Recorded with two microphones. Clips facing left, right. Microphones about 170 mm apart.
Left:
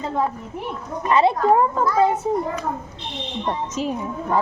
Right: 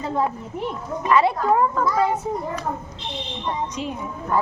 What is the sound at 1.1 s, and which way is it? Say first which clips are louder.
Speech: left 2 dB; 25° left (ahead or behind).